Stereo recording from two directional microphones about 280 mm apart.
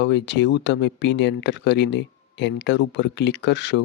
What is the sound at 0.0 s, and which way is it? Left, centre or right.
Speech, left.